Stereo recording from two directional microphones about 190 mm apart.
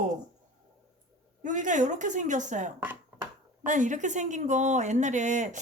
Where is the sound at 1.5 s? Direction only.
40° right (ahead or behind).